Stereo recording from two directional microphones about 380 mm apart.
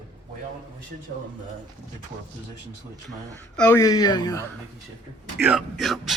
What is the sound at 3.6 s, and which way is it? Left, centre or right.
Speech, centre.